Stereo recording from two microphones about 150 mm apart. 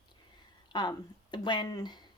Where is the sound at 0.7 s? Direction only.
30° left (ahead or behind).